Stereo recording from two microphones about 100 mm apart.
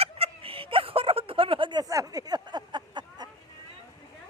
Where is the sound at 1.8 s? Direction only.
35° right (ahead or behind).